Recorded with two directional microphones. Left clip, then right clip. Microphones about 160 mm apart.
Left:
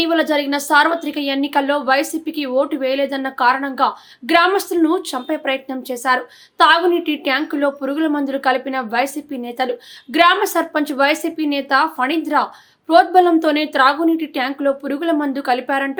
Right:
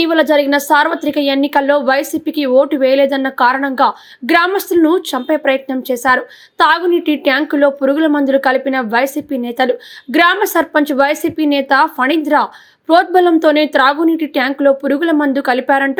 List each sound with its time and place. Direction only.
0.0 s a woman's voice: 25° right (ahead or behind)